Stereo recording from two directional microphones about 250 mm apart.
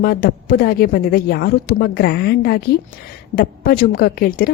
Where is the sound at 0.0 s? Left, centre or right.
Left.